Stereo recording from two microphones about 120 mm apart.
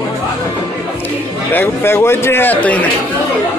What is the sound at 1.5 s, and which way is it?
A man's voice, 20° left (ahead or behind).